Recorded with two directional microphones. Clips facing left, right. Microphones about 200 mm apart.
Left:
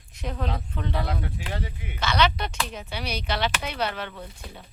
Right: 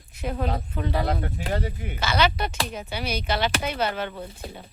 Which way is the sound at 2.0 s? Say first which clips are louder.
Even; 5° right (ahead or behind).